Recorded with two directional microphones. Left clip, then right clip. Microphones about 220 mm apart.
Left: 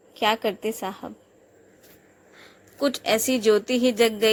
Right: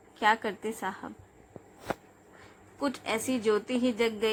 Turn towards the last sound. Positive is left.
turn(degrees=20)  # may be behind; listen again after turning